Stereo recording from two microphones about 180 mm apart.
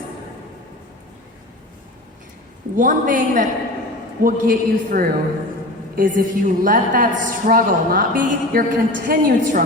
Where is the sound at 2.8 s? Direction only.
45° right (ahead or behind).